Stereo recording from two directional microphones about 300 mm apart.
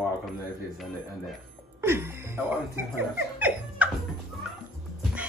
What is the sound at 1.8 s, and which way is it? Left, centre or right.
Music, centre.